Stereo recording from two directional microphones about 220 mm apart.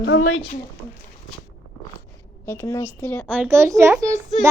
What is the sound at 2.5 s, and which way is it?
Speech, 15° left (ahead or behind).